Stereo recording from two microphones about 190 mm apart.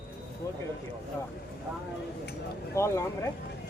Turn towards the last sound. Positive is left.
turn(degrees=15)  # may be behind; listen again after turning